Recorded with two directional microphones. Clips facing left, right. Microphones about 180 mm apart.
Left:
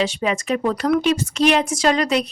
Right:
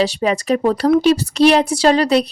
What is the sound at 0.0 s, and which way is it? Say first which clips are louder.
A woman's voice: right 4 dB; 35° right (ahead or behind).